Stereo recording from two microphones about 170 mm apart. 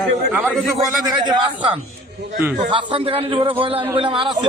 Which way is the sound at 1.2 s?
25° right (ahead or behind).